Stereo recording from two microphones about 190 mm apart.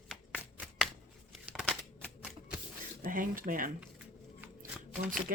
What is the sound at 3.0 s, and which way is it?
Speech, 45° right (ahead or behind).